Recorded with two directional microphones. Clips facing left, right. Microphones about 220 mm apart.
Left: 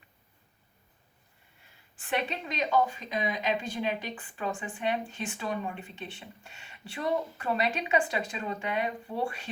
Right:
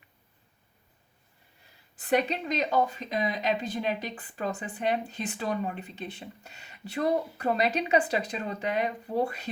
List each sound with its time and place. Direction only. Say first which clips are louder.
2.0 s speech: right 6 dB; 40° right (ahead or behind)